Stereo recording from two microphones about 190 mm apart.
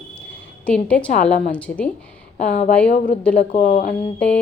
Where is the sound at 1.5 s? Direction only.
5° left (ahead or behind).